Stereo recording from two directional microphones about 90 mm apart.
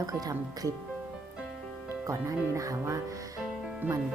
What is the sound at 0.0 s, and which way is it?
Speech, 40° right (ahead or behind).